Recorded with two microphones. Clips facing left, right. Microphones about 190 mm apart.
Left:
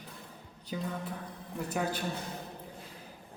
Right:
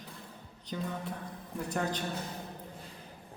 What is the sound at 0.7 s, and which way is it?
A man's voice, 10° left (ahead or behind).